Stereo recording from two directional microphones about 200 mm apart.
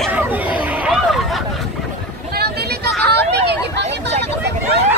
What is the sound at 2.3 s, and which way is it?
Hubbub, 55° right (ahead or behind).